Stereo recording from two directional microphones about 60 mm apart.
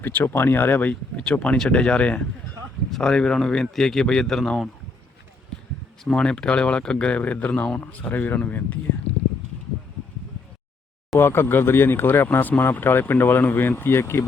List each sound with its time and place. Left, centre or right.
0.0 s speech: left
1.1 s speech: centre
6.1 s speech: centre
11.2 s speech: left